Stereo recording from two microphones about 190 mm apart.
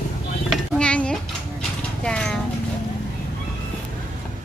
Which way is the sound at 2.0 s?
5° left (ahead or behind).